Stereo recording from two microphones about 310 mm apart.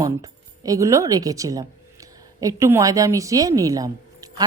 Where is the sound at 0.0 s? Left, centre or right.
Centre.